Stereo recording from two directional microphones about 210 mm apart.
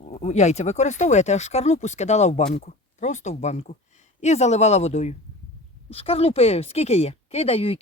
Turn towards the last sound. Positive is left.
turn(degrees=30)  # may be behind; listen again after turning